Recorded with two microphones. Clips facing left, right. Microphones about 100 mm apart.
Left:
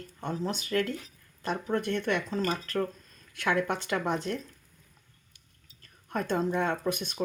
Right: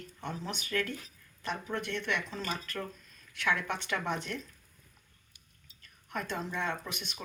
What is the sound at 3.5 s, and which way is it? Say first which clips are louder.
Speech: left 4 dB; 30° left (ahead or behind).